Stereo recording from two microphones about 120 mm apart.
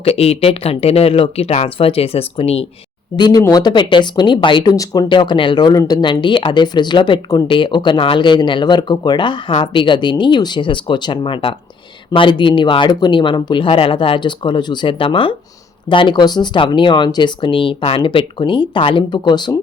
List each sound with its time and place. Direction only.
0.0 s speech: 55° left (ahead or behind)
3.2 s speech: 35° left (ahead or behind)